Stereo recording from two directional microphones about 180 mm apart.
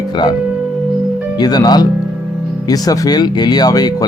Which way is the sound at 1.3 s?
20° left (ahead or behind).